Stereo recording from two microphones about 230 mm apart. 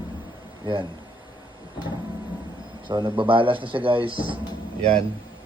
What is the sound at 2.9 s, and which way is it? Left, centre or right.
Speech, right.